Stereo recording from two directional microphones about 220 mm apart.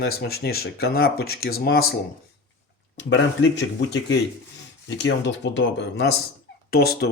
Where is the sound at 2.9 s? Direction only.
55° left (ahead or behind).